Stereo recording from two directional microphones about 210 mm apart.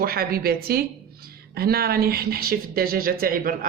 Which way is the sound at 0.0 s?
45° right (ahead or behind).